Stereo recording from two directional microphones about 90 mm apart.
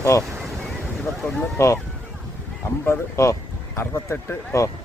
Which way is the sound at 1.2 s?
30° left (ahead or behind).